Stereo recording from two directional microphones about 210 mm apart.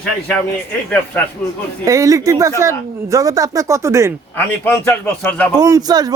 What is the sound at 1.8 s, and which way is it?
Speech, 15° right (ahead or behind).